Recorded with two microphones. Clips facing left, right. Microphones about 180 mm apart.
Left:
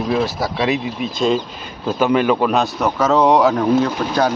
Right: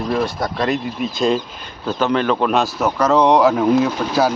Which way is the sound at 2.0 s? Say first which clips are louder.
Left 2 dB; 10° left (ahead or behind).